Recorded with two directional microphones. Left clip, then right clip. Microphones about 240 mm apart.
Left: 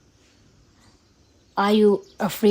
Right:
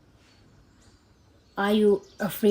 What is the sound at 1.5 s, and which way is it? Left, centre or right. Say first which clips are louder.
Speech: left 4 dB; left.